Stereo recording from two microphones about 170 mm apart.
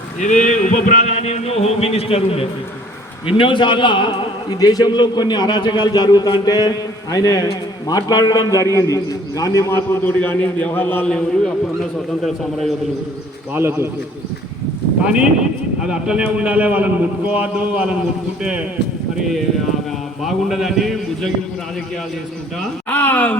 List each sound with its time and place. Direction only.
0.2 s a man's voice: 45° left (ahead or behind); by 12.7 s centre (ahead or behind)
13.5 s a man's voice: 15° right (ahead or behind)
15.0 s a man's voice: 5° right (ahead or behind)
20.2 s a man's voice: centre (ahead or behind)
22.9 s speech: 10° left (ahead or behind)